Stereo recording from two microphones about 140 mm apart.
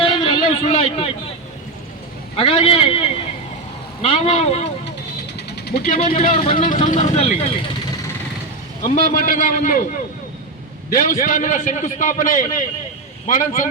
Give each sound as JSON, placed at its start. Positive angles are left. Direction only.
{"t": 0.0, "sound": "a sound", "side_deg": 40}
{"t": 0.6, "sound": "speech", "side_deg": 45}
{"t": 2.3, "sound": "speech", "side_deg": 40}
{"t": 5.8, "sound": "a man's voice", "side_deg": 65}
{"t": 6.3, "sound": "speech", "side_deg": 40}
{"t": 6.8, "sound": "speech", "side_deg": 55}
{"t": 9.1, "sound": "a man's voice", "side_deg": 80}